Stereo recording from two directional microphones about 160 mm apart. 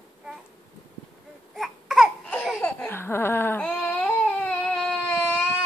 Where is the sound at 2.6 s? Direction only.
15° left (ahead or behind).